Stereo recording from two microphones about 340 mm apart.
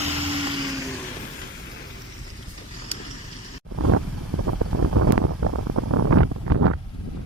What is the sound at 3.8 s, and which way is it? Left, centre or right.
Vehicle, right.